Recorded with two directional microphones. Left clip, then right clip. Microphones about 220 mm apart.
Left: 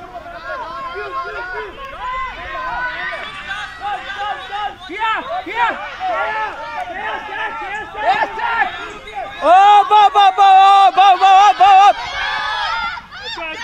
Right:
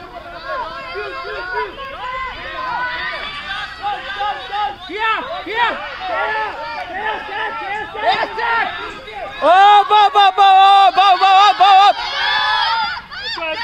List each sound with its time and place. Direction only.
2.9 s run: 15° left (ahead or behind)
4.2 s a man's voice: 30° right (ahead or behind)
7.7 s speech: 25° right (ahead or behind)
9.4 s a sound: 35° right (ahead or behind)